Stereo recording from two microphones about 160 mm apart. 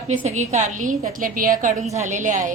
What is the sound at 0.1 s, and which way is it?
A woman's voice, 50° right (ahead or behind).